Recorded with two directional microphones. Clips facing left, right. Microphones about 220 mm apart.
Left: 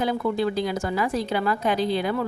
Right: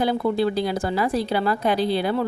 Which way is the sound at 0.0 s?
35° right (ahead or behind).